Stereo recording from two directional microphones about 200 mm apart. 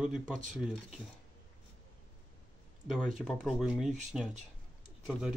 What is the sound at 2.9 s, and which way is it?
Speech, centre (ahead or behind).